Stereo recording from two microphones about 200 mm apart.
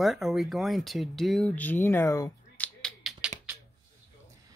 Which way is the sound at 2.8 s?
5° right (ahead or behind).